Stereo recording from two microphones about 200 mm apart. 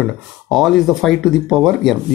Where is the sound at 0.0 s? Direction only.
Centre (ahead or behind).